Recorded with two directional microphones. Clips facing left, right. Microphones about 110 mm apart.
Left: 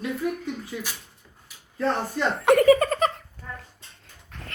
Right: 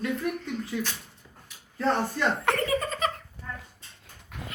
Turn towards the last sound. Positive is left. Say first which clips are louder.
# right 2 dB
turn(degrees=-10)  # may be behind; listen again after turning